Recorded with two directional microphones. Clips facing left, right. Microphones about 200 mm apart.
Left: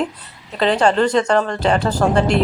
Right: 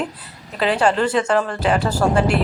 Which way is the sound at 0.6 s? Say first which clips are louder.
Left 2 dB; 5° right (ahead or behind).